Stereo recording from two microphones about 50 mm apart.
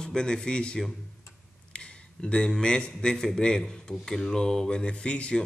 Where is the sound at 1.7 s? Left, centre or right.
Left.